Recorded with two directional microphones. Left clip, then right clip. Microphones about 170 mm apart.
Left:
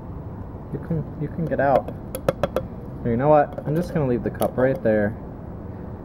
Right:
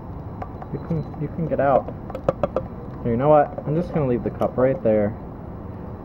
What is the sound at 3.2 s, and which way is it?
Speech, 5° left (ahead or behind).